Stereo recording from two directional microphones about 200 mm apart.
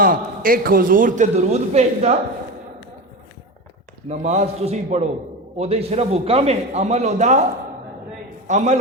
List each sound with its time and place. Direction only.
0.0 s a man's voice: 45° right (ahead or behind)
4.1 s a man's voice: 35° right (ahead or behind)
8.4 s a man's voice: 35° right (ahead or behind)